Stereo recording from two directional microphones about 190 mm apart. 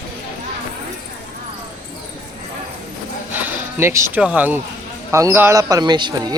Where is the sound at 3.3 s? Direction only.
10° right (ahead or behind).